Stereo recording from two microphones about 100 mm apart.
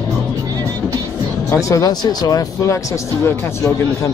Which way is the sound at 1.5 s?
35° left (ahead or behind).